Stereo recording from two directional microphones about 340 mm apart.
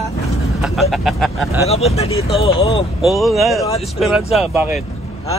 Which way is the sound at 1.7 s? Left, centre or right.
Centre.